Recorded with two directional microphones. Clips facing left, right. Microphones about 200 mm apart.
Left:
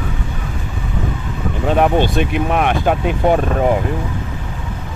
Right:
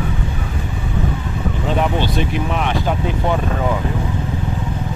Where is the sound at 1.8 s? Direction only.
55° left (ahead or behind).